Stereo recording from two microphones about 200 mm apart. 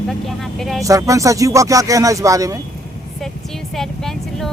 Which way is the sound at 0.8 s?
15° right (ahead or behind).